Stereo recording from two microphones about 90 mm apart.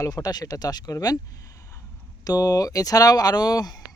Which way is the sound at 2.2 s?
45° left (ahead or behind).